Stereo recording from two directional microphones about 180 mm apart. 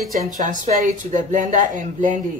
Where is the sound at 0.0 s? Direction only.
Centre (ahead or behind).